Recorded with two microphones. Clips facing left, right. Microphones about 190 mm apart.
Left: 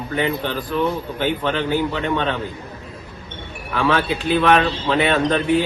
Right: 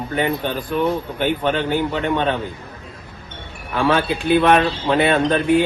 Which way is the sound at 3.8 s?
20° right (ahead or behind).